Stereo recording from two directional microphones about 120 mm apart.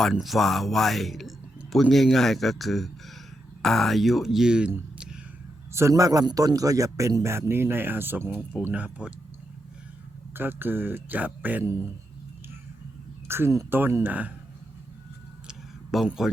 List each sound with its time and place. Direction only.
0.0 s speech: centre (ahead or behind)
5.7 s a man's voice: 25° right (ahead or behind)
10.3 s speech: 15° right (ahead or behind)
13.2 s speech: 20° right (ahead or behind)
15.4 s a sound: centre (ahead or behind)
16.0 s speech: 5° right (ahead or behind)